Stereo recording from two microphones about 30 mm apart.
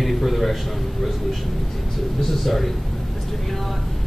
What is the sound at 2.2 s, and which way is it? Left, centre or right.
Speech, centre.